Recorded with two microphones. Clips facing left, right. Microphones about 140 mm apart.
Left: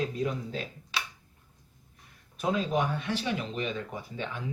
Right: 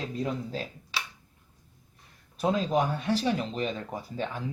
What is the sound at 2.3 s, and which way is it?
Speech, 35° right (ahead or behind).